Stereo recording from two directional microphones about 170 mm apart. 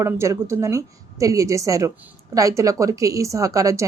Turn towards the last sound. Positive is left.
turn(degrees=-20)  # may be behind; listen again after turning